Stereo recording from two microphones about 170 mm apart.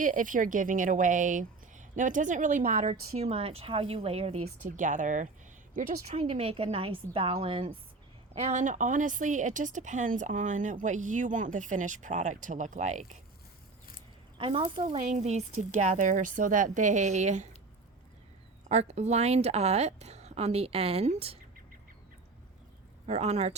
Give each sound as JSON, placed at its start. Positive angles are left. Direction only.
{"t": 0.0, "sound": "speech", "side_deg": -50}
{"t": 4.6, "sound": "a woman's voice", "side_deg": -50}
{"t": 14.3, "sound": "a woman's voice", "side_deg": -30}
{"t": 14.8, "sound": "speech", "side_deg": -45}
{"t": 18.7, "sound": "a woman's voice", "side_deg": -40}
{"t": 23.0, "sound": "a woman's voice", "side_deg": -40}